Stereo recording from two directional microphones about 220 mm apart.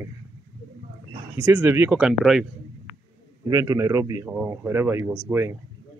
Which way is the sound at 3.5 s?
15° right (ahead or behind).